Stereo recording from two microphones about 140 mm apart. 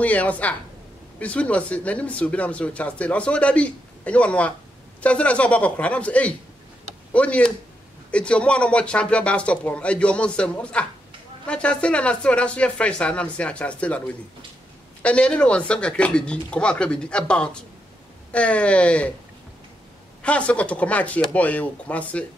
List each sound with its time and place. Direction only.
0.0 s speech: 10° left (ahead or behind)
20.2 s speech: 10° left (ahead or behind)